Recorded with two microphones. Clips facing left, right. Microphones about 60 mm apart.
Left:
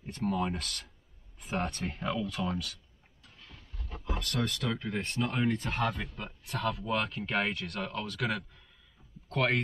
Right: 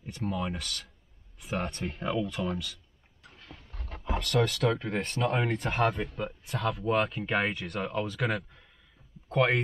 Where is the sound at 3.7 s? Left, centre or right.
Right.